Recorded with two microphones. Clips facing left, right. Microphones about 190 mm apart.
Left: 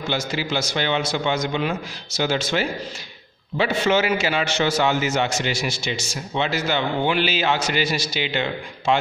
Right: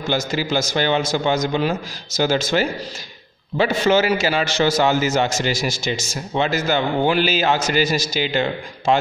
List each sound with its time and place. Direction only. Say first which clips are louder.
0.1 s a man's voice: right 4 dB; 45° right (ahead or behind)